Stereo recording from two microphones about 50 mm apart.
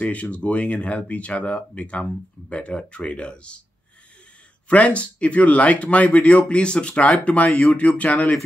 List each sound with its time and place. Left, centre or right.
0.0 s speech: left
4.6 s speech: left
7.4 s speech: centre
7.7 s speech: left